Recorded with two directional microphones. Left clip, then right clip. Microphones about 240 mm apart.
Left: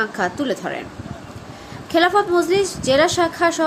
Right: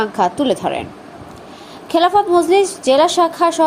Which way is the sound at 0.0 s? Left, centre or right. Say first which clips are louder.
Right 5 dB; centre.